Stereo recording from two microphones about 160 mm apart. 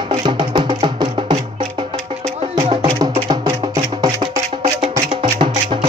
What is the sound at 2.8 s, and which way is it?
Music, 25° right (ahead or behind).